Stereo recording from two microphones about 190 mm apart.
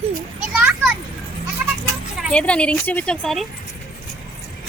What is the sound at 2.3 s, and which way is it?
Speech, 5° left (ahead or behind).